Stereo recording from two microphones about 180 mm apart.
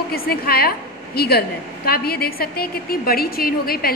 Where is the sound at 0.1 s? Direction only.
55° left (ahead or behind).